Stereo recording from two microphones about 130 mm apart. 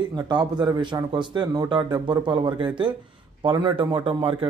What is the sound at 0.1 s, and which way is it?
A man's voice, 35° right (ahead or behind).